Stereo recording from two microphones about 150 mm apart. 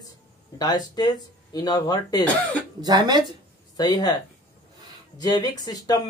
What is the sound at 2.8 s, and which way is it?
Speech, 25° right (ahead or behind).